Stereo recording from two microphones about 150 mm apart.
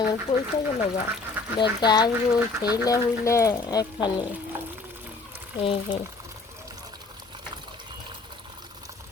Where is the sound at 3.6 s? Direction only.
30° left (ahead or behind).